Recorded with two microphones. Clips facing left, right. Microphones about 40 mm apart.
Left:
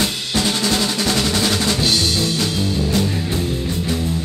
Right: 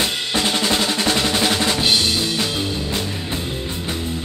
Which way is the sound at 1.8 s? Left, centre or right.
Right.